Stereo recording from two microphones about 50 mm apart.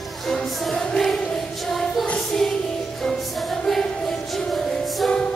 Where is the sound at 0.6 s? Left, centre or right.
Centre.